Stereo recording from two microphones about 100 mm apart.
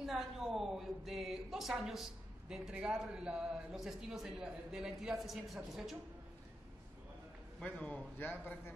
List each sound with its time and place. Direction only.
0.0 s a man's voice: centre (ahead or behind)
7.6 s a man's voice: 15° left (ahead or behind)